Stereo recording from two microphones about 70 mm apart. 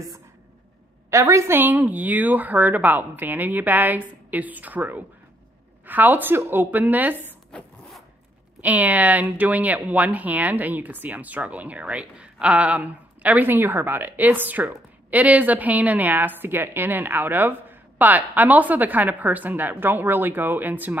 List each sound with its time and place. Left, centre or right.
1.1 s a woman's voice: right
1.5 s speech: right
7.5 s zipper: centre
8.5 s speech: right